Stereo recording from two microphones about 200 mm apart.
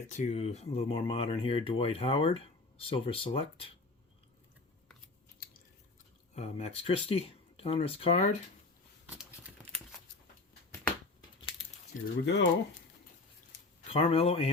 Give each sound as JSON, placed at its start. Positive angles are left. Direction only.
{"t": 0.1, "sound": "speech", "side_deg": 35}
{"t": 6.3, "sound": "speech", "side_deg": 35}
{"t": 12.2, "sound": "speech", "side_deg": 60}
{"t": 13.8, "sound": "speech", "side_deg": 30}